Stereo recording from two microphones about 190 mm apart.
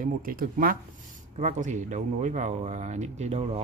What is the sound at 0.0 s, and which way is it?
Speech, 45° right (ahead or behind).